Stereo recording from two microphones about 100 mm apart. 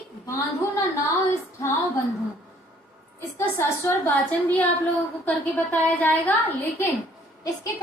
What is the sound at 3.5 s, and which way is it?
A woman's voice, 20° left (ahead or behind).